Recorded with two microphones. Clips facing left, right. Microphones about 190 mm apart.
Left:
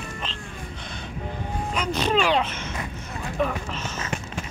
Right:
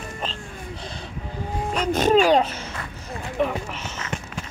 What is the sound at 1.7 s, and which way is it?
Speech, 45° right (ahead or behind).